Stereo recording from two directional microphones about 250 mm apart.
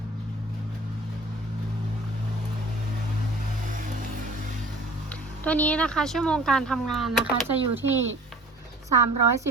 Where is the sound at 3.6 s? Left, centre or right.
Right.